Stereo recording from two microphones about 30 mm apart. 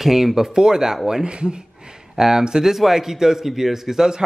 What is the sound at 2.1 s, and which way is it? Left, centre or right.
Speech, right.